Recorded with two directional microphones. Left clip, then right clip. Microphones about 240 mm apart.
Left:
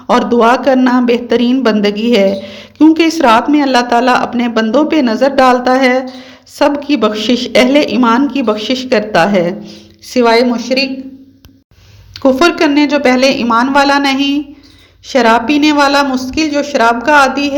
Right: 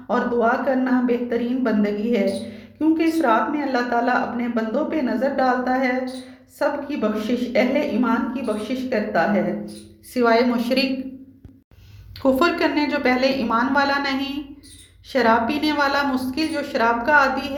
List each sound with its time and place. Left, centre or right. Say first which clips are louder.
0.1 s a man's voice: left 11 dB; left
10.5 s a woman's voice: left 8 dB; centre
12.1 s a woman's voice: left 9 dB; left